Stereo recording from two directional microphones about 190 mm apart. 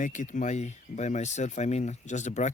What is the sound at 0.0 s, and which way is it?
Speech, 40° left (ahead or behind).